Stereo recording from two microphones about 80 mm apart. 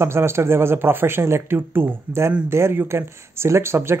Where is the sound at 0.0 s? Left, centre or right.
Right.